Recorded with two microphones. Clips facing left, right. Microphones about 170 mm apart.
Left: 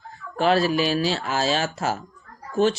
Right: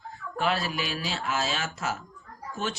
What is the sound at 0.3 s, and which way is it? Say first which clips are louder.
Speech: left 9 dB; 30° left (ahead or behind).